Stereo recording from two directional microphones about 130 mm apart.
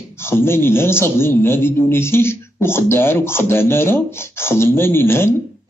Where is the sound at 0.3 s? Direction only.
20° left (ahead or behind).